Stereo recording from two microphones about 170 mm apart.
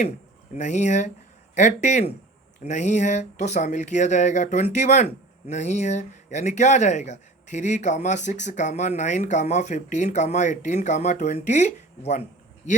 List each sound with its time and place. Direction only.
0.5 s speech: 45° left (ahead or behind)